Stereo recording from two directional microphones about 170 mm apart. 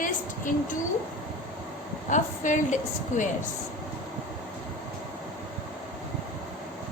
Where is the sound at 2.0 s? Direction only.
45° left (ahead or behind).